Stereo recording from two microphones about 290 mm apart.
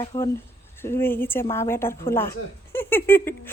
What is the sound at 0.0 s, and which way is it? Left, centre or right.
A woman's voice, centre.